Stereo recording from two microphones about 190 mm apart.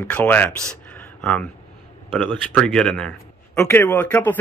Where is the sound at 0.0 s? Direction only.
10° left (ahead or behind).